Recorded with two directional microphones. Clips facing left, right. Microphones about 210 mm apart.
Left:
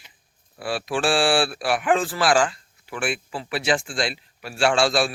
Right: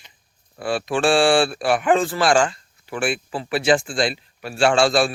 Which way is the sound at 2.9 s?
30° right (ahead or behind).